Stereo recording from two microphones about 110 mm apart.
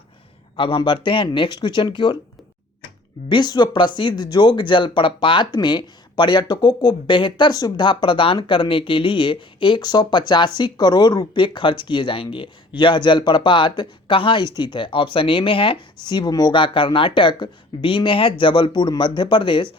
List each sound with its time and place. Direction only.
0.5 s speech: 50° left (ahead or behind)
3.2 s speech: 40° left (ahead or behind)